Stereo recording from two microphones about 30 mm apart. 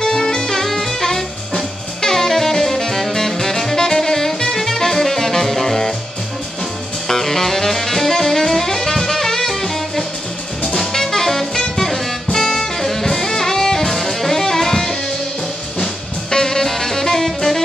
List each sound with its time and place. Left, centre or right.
0.0 s music: centre
7.1 s music: centre
10.8 s jazz: centre
11.7 s music: centre